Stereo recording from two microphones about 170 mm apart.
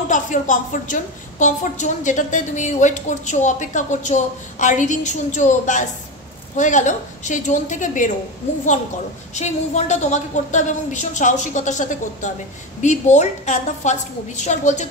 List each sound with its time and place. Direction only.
0.1 s a woman's voice: 50° left (ahead or behind)
9.3 s a woman's voice: 45° left (ahead or behind)